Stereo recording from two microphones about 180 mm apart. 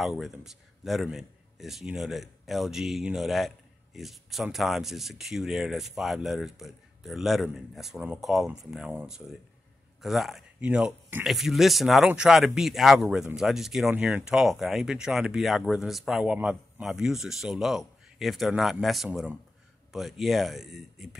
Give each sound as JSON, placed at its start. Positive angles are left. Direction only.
{"t": 0.0, "sound": "a man's voice", "side_deg": 0}